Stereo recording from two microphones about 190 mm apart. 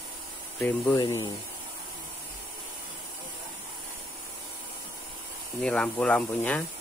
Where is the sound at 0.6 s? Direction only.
20° left (ahead or behind).